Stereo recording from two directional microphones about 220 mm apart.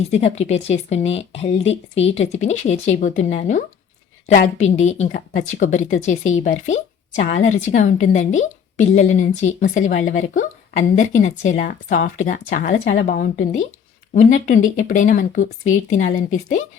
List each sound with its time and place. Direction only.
0.0 s a woman's voice: 30° left (ahead or behind)
12.7 s speech: 55° left (ahead or behind)
13.1 s a woman's voice: 40° left (ahead or behind)